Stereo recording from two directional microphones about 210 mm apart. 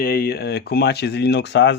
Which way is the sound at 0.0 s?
45° left (ahead or behind).